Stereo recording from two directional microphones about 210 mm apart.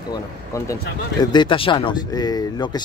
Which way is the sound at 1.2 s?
20° left (ahead or behind).